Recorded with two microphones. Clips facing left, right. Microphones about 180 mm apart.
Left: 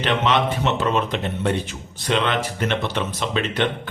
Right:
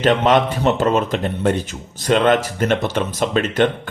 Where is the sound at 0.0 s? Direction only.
45° right (ahead or behind).